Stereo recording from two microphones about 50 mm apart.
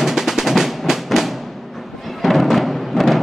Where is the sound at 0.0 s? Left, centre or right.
Centre.